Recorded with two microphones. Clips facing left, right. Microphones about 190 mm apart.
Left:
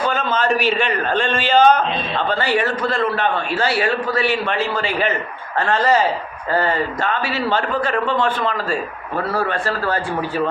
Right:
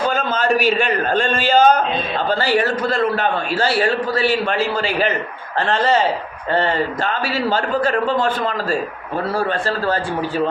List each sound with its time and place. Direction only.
0.1 s a man's voice: 40° right (ahead or behind)
9.1 s a man's voice: 30° right (ahead or behind)